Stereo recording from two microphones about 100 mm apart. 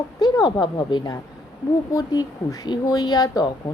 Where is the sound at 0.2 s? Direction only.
40° left (ahead or behind).